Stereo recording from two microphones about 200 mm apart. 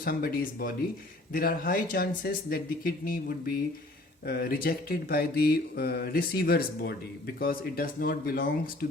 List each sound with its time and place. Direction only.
0.0 s speech: 45° left (ahead or behind)